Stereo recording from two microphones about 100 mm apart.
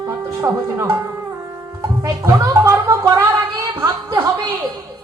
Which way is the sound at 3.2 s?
30° right (ahead or behind).